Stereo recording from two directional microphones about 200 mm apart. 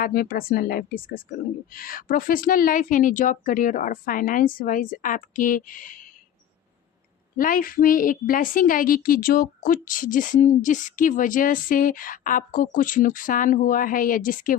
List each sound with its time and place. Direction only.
0.0 s a woman's voice: 45° left (ahead or behind)
7.3 s a woman's voice: 45° left (ahead or behind)